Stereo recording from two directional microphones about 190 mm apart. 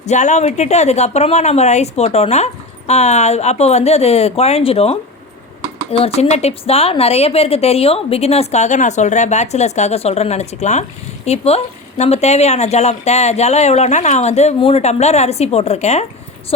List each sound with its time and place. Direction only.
0.0 s speech: 40° left (ahead or behind)